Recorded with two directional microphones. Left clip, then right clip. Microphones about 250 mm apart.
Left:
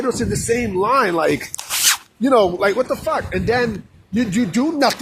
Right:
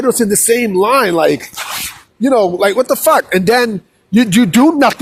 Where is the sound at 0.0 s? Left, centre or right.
Right; by 2.6 s centre.